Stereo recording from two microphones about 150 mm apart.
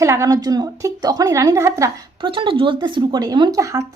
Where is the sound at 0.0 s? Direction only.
20° right (ahead or behind).